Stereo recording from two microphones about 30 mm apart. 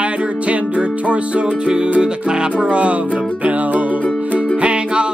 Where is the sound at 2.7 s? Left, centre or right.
Right.